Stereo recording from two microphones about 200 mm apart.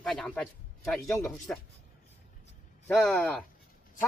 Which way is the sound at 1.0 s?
15° left (ahead or behind).